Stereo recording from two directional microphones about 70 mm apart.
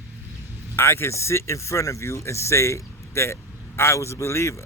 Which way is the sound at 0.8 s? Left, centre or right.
Left.